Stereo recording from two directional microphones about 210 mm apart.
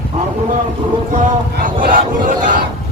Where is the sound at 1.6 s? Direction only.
40° right (ahead or behind).